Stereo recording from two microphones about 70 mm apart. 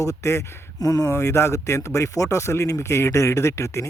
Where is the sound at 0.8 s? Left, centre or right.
Left.